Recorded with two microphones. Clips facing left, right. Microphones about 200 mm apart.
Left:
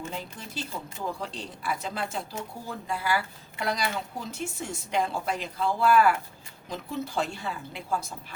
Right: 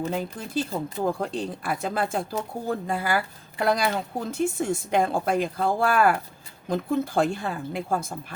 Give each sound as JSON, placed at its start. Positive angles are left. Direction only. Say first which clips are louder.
{"t": 0.1, "sound": "speech", "louder": "right 9 dB", "side_deg": -50}